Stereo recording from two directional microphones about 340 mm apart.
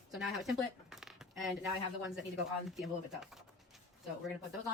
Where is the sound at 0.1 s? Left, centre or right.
Centre.